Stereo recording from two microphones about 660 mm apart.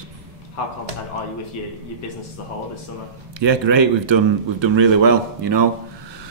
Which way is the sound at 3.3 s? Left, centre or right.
Right.